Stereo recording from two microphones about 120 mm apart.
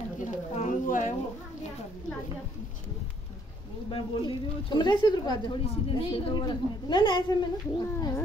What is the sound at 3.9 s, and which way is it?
Speech, 40° left (ahead or behind).